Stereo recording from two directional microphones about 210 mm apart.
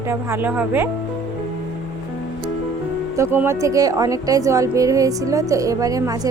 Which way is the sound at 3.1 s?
10° right (ahead or behind).